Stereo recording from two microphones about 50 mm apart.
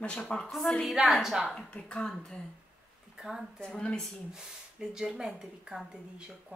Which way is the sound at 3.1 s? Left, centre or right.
Centre.